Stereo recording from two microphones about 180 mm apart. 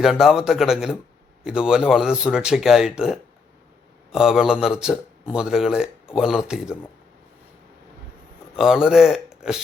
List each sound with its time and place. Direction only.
0.0 s speech: centre (ahead or behind)
8.5 s speech: 5° right (ahead or behind)